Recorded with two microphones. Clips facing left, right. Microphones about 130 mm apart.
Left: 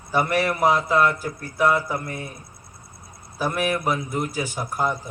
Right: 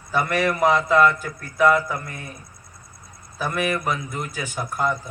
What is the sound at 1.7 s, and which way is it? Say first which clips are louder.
Speech: right 1 dB; 10° left (ahead or behind).